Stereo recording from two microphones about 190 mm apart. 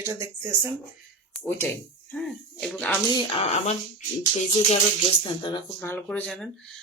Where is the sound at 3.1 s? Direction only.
30° left (ahead or behind).